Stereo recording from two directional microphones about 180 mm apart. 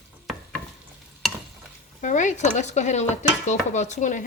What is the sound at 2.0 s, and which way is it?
Dishes, 45° left (ahead or behind).